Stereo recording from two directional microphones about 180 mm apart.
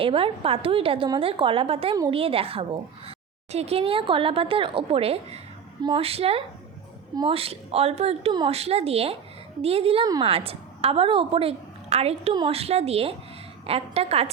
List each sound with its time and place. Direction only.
0.0 s a woman's voice: 30° right (ahead or behind)